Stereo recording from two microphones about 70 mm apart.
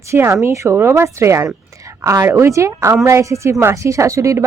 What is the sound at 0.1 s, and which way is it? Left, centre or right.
Speech, right.